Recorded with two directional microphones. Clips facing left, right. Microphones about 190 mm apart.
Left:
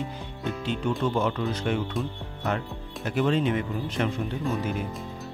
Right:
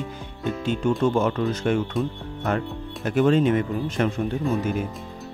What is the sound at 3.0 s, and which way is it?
Speech, 50° right (ahead or behind).